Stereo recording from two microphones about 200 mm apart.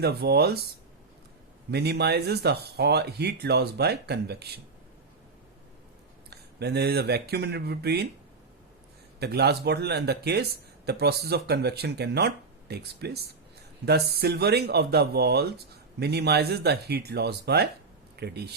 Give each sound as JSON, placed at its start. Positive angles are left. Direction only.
{"t": 0.0, "sound": "speech", "side_deg": -55}
{"t": 1.7, "sound": "speech", "side_deg": -55}
{"t": 6.3, "sound": "speech", "side_deg": -55}
{"t": 9.2, "sound": "speech", "side_deg": -55}